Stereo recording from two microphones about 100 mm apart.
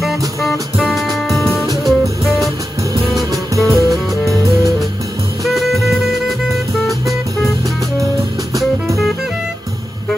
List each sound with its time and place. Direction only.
0.0 s music: centre (ahead or behind)
3.3 s music: 30° right (ahead or behind)
4.1 s music: centre (ahead or behind)
5.4 s music: centre (ahead or behind)
8.5 s music: centre (ahead or behind)